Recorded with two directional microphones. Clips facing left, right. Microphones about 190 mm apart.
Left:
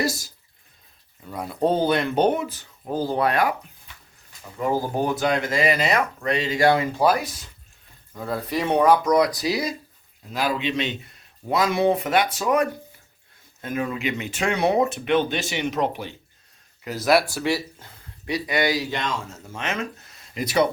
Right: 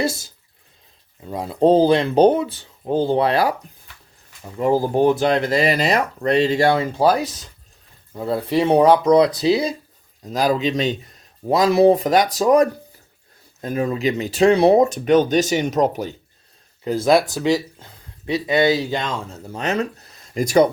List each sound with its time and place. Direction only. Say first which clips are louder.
1.3 s speech: right 7 dB; 25° right (ahead or behind)
4.6 s speech: right 7 dB; 35° right (ahead or behind)
10.2 s speech: right 6 dB; 40° right (ahead or behind)
16.8 s speech: right 4 dB; 30° right (ahead or behind)
17.4 s speech: right 5 dB; 15° right (ahead or behind); by 20.7 s 45° right (ahead or behind)